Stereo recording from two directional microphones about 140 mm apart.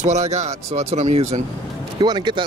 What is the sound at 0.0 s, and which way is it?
Speech, 55° right (ahead or behind).